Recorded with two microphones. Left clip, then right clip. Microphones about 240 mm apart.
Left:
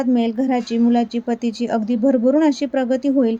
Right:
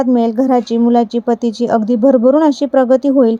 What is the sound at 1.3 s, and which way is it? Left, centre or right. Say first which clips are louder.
Speech: right 8 dB; right.